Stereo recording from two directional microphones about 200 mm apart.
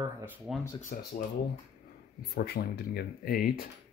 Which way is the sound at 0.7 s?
40° left (ahead or behind).